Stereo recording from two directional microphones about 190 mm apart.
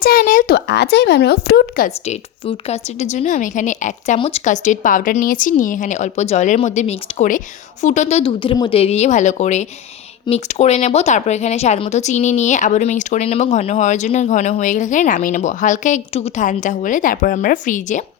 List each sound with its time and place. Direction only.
0.0 s speech: 50° left (ahead or behind)
2.0 s speech: 30° left (ahead or behind)